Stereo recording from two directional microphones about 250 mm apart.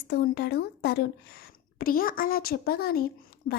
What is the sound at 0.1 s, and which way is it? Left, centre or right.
A child's voice, left.